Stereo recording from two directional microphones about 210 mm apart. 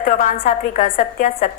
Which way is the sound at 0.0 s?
40° left (ahead or behind).